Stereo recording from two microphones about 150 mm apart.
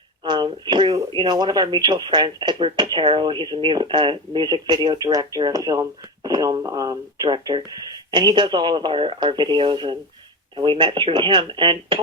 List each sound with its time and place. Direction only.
0.3 s speech: 30° right (ahead or behind)